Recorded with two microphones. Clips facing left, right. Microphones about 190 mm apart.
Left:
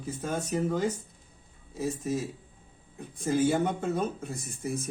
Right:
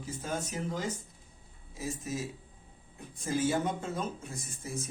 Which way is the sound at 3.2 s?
60° left (ahead or behind).